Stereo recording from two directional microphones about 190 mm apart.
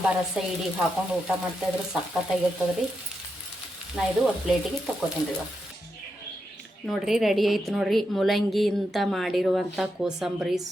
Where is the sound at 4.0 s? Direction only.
Centre (ahead or behind).